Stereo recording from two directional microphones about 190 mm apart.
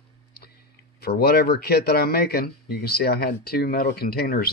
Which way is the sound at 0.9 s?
55° left (ahead or behind).